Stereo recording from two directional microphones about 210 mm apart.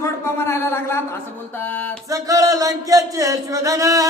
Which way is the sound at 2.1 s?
15° right (ahead or behind).